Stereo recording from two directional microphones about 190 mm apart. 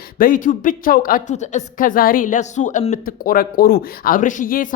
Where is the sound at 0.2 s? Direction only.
45° left (ahead or behind).